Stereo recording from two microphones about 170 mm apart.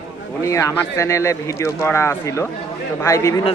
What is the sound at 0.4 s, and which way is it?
Speech, 15° left (ahead or behind).